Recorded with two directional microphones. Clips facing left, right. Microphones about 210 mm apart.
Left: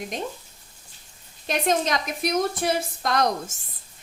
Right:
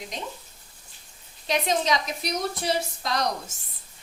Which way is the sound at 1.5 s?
50° left (ahead or behind).